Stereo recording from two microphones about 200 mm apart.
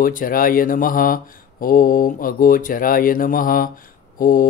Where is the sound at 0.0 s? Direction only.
45° left (ahead or behind).